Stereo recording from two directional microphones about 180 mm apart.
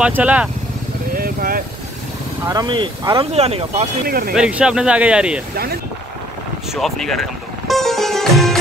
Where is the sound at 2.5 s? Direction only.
25° right (ahead or behind).